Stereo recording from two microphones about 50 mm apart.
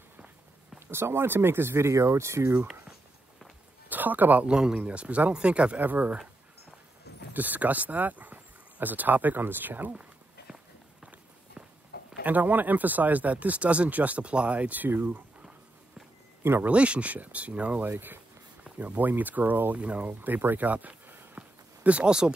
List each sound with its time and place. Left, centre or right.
0.7 s speech: right
3.9 s speech: right
4.5 s speech: centre
4.7 s speech: right
5.8 s speech: right
7.3 s speech: right
12.2 s speech: right
16.6 s speech: right
17.9 s speech: right
18.6 s speech: right
20.2 s speech: right
21.4 s a sound: right